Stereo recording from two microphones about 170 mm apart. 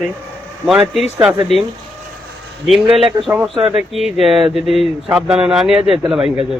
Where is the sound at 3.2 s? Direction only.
30° right (ahead or behind).